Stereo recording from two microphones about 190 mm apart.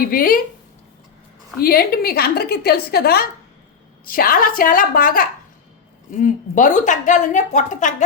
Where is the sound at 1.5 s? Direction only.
55° left (ahead or behind).